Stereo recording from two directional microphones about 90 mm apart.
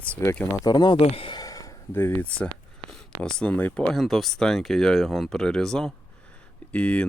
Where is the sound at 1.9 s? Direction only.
25° left (ahead or behind).